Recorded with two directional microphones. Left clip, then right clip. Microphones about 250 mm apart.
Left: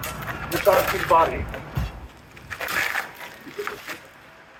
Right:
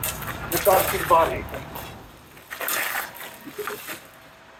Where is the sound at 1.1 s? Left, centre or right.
Left.